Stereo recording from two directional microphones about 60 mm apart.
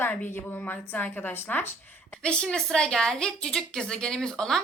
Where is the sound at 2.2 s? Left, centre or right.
Centre.